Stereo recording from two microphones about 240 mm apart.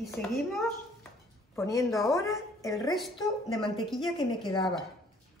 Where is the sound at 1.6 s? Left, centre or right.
Centre.